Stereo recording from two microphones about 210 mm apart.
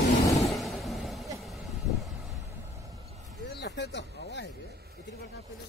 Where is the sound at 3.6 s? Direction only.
55° left (ahead or behind).